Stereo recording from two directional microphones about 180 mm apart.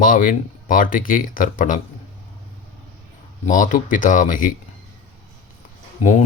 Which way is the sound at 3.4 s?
45° left (ahead or behind).